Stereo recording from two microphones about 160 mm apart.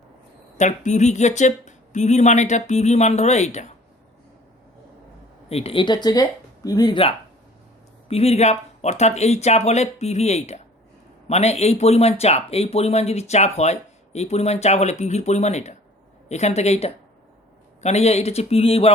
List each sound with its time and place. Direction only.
0.5 s speech: 50° left (ahead or behind)
5.5 s speech: 40° left (ahead or behind)